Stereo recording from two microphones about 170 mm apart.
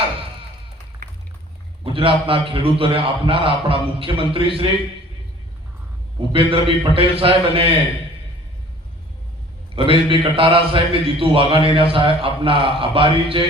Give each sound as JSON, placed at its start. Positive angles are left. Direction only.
{"t": 1.8, "sound": "a man's voice", "side_deg": -30}
{"t": 6.3, "sound": "a man's voice", "side_deg": -30}
{"t": 9.7, "sound": "a man's voice", "side_deg": -30}